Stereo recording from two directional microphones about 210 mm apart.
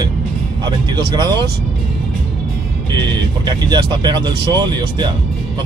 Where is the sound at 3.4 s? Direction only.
20° right (ahead or behind).